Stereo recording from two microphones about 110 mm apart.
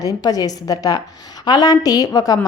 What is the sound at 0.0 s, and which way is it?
A woman's voice, 35° left (ahead or behind).